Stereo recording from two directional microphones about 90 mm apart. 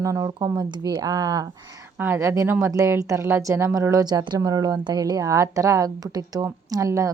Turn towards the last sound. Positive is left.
turn(degrees=-35)  # may be behind; listen again after turning